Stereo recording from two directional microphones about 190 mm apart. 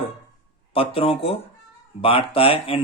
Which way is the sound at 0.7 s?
30° left (ahead or behind).